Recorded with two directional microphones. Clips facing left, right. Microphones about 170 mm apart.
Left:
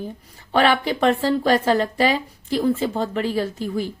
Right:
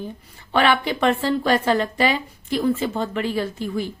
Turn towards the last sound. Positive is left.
turn(degrees=40)  # may be behind; listen again after turning